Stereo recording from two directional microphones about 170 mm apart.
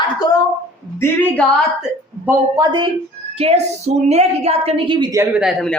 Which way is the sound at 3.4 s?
40° right (ahead or behind).